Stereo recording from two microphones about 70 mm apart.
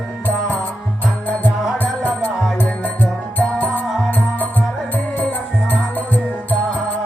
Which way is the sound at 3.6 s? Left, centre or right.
Left.